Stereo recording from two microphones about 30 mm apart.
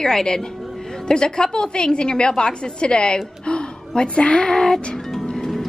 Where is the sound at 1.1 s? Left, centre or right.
Left.